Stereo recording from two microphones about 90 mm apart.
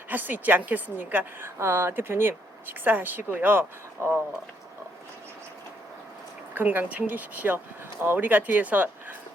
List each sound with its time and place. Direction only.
0.1 s a woman's voice: 20° right (ahead or behind)
6.5 s a woman's voice: 20° right (ahead or behind)